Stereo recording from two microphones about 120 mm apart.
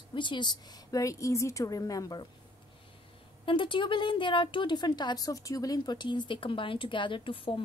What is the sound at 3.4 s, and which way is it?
A woman's voice, 45° left (ahead or behind).